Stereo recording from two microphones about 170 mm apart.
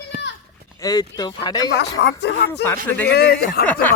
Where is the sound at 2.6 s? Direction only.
10° left (ahead or behind).